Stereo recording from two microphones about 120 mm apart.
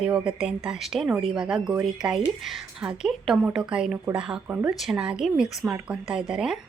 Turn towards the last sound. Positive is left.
turn(degrees=-5)  # may be behind; listen again after turning